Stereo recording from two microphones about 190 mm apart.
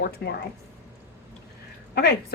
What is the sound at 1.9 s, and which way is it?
Speech, 60° left (ahead or behind).